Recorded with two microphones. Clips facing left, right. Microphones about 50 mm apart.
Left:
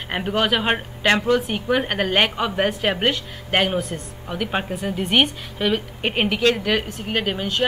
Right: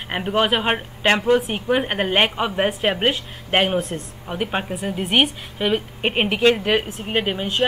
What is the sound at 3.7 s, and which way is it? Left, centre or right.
Speech, right.